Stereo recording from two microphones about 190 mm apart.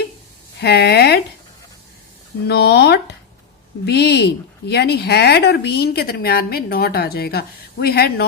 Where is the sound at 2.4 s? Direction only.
60° left (ahead or behind).